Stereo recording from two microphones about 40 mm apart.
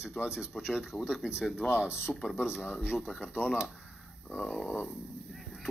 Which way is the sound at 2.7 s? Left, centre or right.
Left.